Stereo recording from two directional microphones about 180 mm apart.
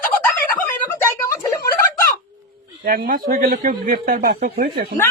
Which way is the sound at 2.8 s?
55° right (ahead or behind).